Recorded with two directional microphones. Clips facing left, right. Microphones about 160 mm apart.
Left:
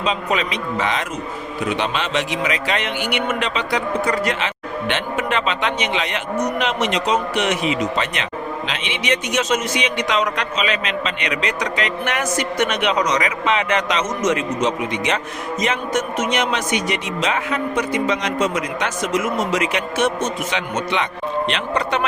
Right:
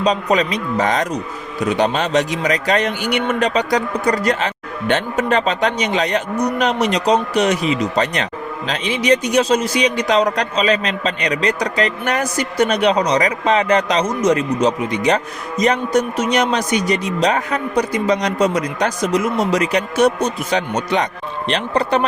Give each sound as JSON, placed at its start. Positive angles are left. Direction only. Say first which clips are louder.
{"t": 0.0, "sound": "a man's voice", "louder": "right 5 dB", "side_deg": -40}